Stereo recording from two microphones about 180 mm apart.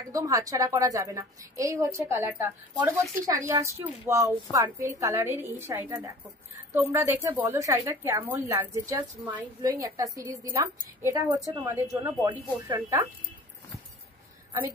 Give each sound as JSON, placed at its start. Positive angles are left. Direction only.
{"t": 0.1, "sound": "a woman's voice", "side_deg": -20}